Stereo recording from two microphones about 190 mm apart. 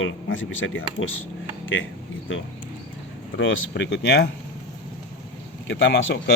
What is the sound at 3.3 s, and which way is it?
Speech, 75° left (ahead or behind).